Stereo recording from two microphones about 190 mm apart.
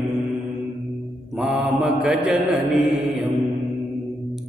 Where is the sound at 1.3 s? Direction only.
5° right (ahead or behind).